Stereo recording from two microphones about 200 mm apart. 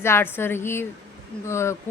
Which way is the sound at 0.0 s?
10° left (ahead or behind).